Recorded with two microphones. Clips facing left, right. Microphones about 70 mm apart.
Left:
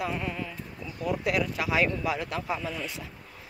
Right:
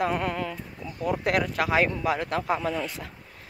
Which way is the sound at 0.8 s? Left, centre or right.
Right.